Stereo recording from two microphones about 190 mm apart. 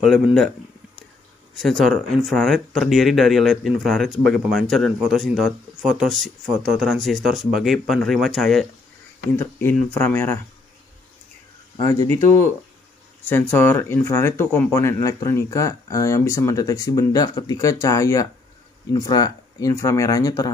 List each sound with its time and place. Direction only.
0.0 s speech: centre (ahead or behind)
1.5 s speech: centre (ahead or behind)
13.2 s speech: 10° left (ahead or behind)